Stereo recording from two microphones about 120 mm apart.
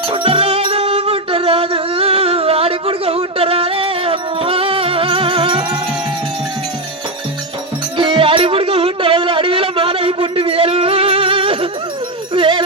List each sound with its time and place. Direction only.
0.1 s music: 45° right (ahead or behind)
7.9 s music: 45° right (ahead or behind)
12.3 s a sound: 45° right (ahead or behind)